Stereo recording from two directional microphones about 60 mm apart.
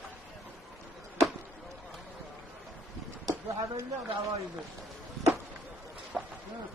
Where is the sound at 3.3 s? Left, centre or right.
Right.